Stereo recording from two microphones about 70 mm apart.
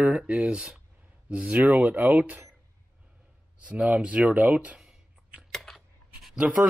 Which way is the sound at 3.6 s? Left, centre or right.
Centre.